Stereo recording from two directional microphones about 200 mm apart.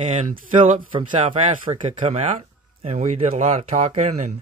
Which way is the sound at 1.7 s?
35° right (ahead or behind).